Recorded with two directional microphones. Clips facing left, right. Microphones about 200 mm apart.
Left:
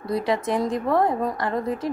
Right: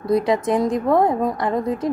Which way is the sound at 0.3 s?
20° right (ahead or behind).